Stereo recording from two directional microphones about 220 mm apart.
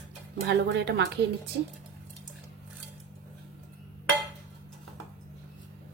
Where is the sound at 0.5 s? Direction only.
50° right (ahead or behind).